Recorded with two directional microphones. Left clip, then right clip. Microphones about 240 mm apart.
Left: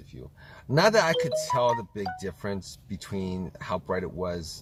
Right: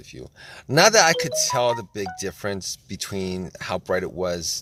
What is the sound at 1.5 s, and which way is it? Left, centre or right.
Speech, right.